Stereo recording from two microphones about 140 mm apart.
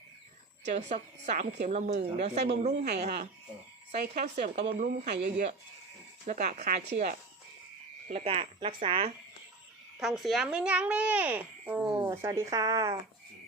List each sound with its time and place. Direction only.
0.6 s a woman's voice: 55° right (ahead or behind)
6.2 s a woman's voice: 60° right (ahead or behind)
8.0 s speech: 50° right (ahead or behind)
10.0 s a child's voice: centre (ahead or behind); by 13.0 s 25° right (ahead or behind)